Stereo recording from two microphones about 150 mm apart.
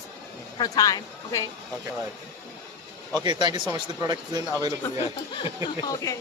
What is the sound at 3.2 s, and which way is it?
Speech, 30° right (ahead or behind).